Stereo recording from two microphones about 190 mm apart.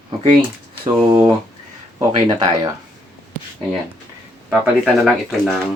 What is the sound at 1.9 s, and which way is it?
Speech, 20° right (ahead or behind).